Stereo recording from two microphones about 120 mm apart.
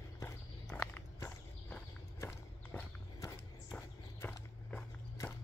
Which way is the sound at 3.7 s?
20° left (ahead or behind).